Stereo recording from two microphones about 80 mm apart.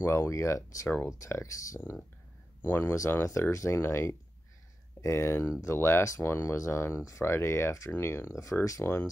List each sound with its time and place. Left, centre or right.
0.0 s speech: left
0.8 s speech: left
1.2 s speech: left
2.6 s speech: left
3.3 s speech: left